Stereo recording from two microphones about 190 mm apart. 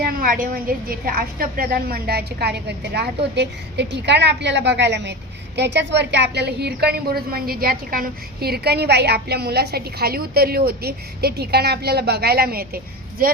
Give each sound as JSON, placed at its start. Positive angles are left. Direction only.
{"t": 0.0, "sound": "a woman's voice", "side_deg": -50}